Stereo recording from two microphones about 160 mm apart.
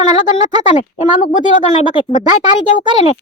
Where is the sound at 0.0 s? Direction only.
45° left (ahead or behind).